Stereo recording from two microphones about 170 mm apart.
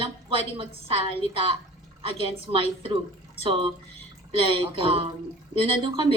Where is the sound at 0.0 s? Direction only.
35° right (ahead or behind).